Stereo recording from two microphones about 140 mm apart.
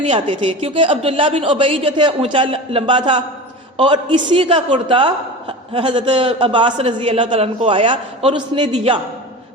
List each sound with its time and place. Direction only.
0.4 s a man's voice: 40° right (ahead or behind)
8.7 s a man's voice: 45° right (ahead or behind)